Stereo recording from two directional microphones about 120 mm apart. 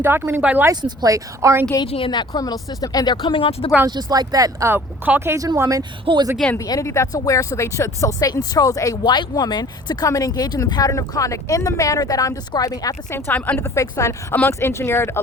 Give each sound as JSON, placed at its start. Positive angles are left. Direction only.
{"t": 0.0, "sound": "speech", "side_deg": -15}
{"t": 0.7, "sound": "speech", "side_deg": -35}
{"t": 1.9, "sound": "speech", "side_deg": 45}
{"t": 3.2, "sound": "speech", "side_deg": 45}
{"t": 3.8, "sound": "speech", "side_deg": -35}
{"t": 4.7, "sound": "speech", "side_deg": -15}
{"t": 6.1, "sound": "speech", "side_deg": -50}
{"t": 6.6, "sound": "speech", "side_deg": 25}